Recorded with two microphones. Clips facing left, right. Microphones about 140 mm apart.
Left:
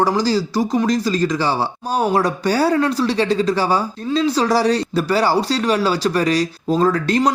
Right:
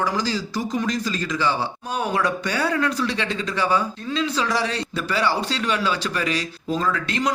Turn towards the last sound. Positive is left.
turn(degrees=40)  # may be behind; listen again after turning